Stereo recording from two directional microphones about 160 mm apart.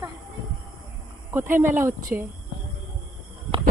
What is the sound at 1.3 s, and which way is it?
Speech, 15° right (ahead or behind).